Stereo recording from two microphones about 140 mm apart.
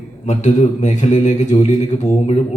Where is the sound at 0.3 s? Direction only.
55° left (ahead or behind).